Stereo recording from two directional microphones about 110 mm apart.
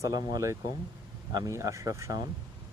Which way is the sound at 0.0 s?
30° right (ahead or behind).